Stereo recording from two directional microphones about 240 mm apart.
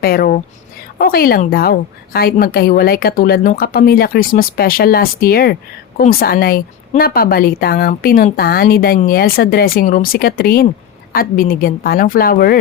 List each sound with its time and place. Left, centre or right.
0.0 s speech: left